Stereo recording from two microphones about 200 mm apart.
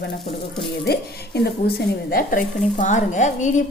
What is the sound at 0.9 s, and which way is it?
Speech, 55° left (ahead or behind).